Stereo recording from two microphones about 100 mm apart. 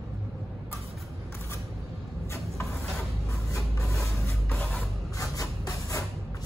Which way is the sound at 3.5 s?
30° left (ahead or behind).